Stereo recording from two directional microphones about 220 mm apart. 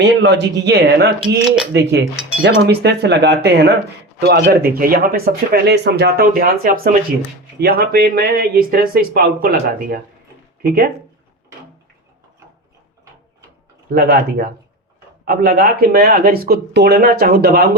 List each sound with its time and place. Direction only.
0.0 s speech: 55° right (ahead or behind)
13.9 s speech: 45° right (ahead or behind)